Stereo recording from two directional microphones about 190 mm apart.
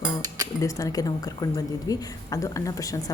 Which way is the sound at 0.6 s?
20° left (ahead or behind).